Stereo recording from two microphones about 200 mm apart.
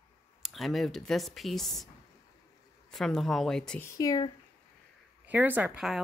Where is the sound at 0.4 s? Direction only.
Centre (ahead or behind).